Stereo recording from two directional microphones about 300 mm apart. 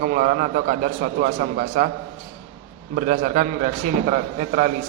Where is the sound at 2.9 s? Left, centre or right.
Right.